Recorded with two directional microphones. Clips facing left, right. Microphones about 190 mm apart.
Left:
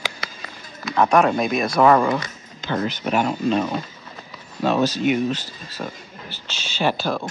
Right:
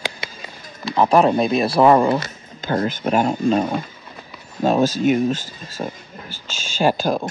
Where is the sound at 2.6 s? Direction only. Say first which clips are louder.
Right 3 dB; 50° right (ahead or behind).